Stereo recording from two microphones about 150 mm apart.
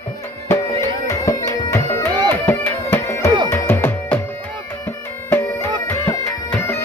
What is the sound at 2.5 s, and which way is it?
Music, 15° left (ahead or behind).